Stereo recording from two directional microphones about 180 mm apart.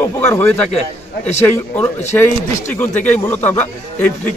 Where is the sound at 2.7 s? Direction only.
10° left (ahead or behind).